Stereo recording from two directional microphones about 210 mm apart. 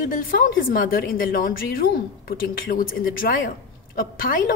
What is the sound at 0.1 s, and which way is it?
A woman's voice, 40° left (ahead or behind).